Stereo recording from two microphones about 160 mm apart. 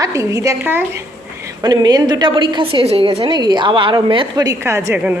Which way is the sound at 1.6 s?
25° right (ahead or behind).